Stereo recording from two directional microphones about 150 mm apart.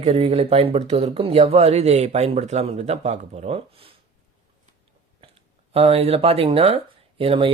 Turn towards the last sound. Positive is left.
turn(degrees=-40)  # may be behind; listen again after turning